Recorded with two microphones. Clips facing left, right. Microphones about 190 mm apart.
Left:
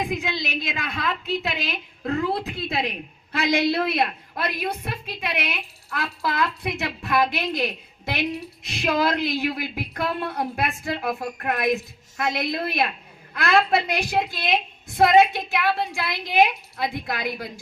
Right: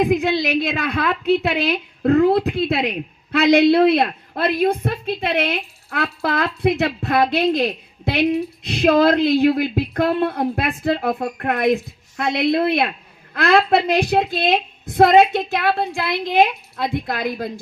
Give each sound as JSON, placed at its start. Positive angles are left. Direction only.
{"t": 0.0, "sound": "a woman's voice", "side_deg": -60}